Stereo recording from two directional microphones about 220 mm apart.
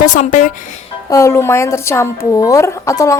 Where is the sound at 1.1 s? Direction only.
15° left (ahead or behind).